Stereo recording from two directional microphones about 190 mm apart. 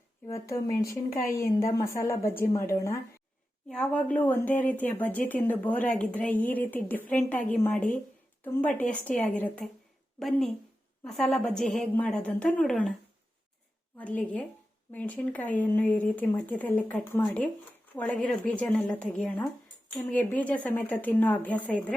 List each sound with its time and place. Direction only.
0.3 s speech: 15° left (ahead or behind)
8.4 s a woman's voice: 10° left (ahead or behind)
14.0 s a woman's voice: 5° left (ahead or behind)